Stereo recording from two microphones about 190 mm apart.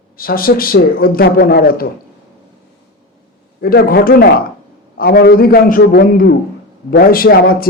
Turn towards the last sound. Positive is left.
turn(degrees=50)  # may be behind; listen again after turning